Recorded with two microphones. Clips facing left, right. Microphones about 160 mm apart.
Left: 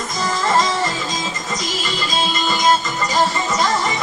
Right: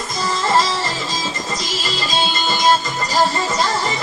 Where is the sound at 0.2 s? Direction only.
30° right (ahead or behind).